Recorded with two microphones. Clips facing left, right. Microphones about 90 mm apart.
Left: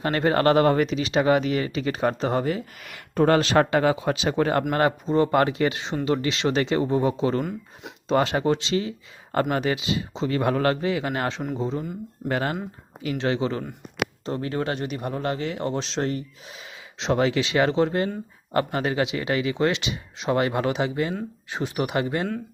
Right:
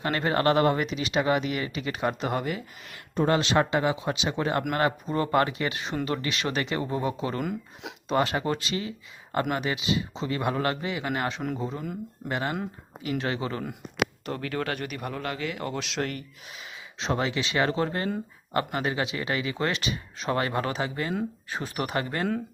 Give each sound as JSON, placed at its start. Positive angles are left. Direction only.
{"t": 0.0, "sound": "speech", "side_deg": 35}
{"t": 3.2, "sound": "speech", "side_deg": 50}
{"t": 7.4, "sound": "speech", "side_deg": 0}
{"t": 8.0, "sound": "speech", "side_deg": 30}
{"t": 13.1, "sound": "speech", "side_deg": 30}